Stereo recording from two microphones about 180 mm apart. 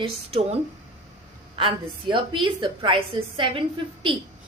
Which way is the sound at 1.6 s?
30° right (ahead or behind).